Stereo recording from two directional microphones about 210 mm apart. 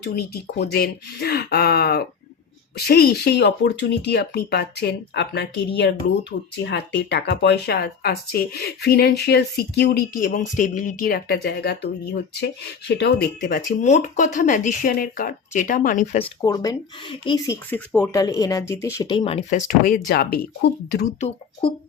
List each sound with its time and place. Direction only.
0.0 s speech: 50° left (ahead or behind)
16.1 s speech: 20° left (ahead or behind); by 21.1 s 45° left (ahead or behind)